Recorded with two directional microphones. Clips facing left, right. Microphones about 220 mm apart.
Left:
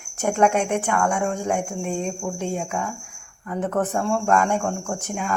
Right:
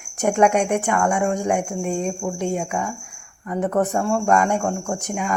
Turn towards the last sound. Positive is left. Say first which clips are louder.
# right 2 dB
turn(degrees=-10)  # may be behind; listen again after turning